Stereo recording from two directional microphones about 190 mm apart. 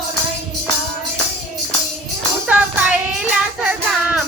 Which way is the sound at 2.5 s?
5° right (ahead or behind).